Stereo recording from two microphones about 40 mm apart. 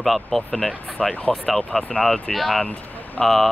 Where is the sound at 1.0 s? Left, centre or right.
Left.